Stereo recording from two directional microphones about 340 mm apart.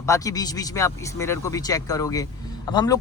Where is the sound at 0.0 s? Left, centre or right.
Centre.